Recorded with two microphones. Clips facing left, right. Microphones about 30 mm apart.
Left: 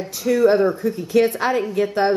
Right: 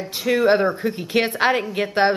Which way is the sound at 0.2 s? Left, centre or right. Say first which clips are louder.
Left 2 dB; right.